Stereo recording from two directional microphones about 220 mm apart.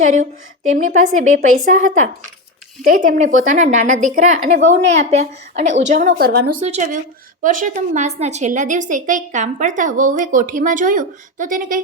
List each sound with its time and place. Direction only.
0.0 s a woman's voice: 35° right (ahead or behind)
6.6 s a woman's voice: 30° right (ahead or behind)